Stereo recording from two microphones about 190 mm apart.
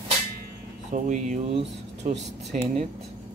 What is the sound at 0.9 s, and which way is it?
Speech, 40° right (ahead or behind).